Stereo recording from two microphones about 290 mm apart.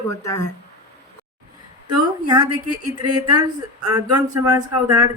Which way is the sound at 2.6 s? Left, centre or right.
Right.